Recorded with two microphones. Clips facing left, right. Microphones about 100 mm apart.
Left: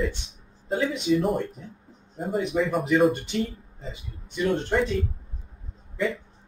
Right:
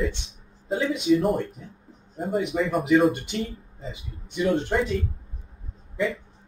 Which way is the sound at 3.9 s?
20° right (ahead or behind).